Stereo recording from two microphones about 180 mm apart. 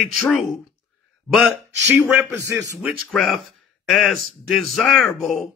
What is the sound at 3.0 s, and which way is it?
Speech, centre (ahead or behind).